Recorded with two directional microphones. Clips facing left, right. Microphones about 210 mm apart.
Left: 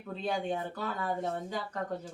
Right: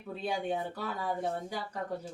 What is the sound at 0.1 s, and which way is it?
Speech, 10° right (ahead or behind).